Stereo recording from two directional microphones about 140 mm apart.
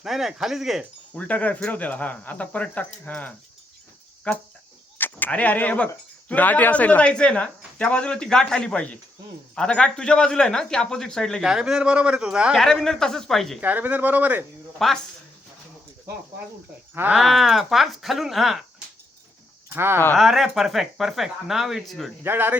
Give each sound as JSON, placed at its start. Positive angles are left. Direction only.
{"t": 0.0, "sound": "a man's voice", "side_deg": 0}
{"t": 1.1, "sound": "a man's voice", "side_deg": 10}
{"t": 13.6, "sound": "speech", "side_deg": -10}
{"t": 14.8, "sound": "a man's voice", "side_deg": 0}
{"t": 16.9, "sound": "speech", "side_deg": -15}
{"t": 17.2, "sound": "a man's voice", "side_deg": 0}
{"t": 19.7, "sound": "speech", "side_deg": -15}
{"t": 20.1, "sound": "a man's voice", "side_deg": 0}
{"t": 22.2, "sound": "speech", "side_deg": -15}